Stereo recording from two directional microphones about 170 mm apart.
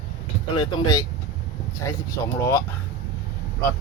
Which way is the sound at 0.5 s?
25° left (ahead or behind).